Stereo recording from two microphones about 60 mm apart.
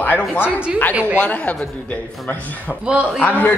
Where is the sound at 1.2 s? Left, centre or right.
Left.